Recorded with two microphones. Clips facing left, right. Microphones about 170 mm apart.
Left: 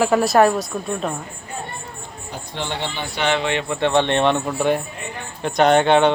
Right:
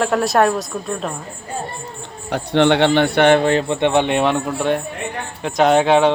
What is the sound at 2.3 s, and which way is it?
A man's voice, 70° right (ahead or behind).